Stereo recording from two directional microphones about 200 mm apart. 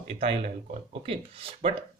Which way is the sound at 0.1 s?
30° right (ahead or behind).